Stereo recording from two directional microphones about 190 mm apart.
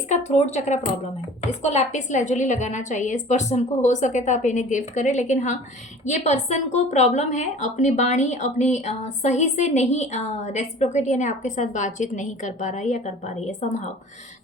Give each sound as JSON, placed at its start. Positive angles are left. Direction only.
{"t": 0.1, "sound": "a woman's voice", "side_deg": 35}